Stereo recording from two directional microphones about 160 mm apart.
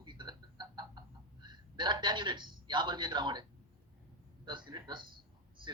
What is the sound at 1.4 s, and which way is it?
A man's voice, 25° right (ahead or behind).